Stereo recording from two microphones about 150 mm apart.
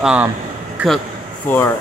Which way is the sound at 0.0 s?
5° right (ahead or behind).